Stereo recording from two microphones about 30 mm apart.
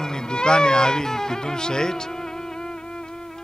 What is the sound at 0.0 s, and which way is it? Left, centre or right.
Speech, left.